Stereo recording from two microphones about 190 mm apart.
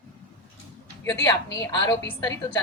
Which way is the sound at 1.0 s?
15° left (ahead or behind).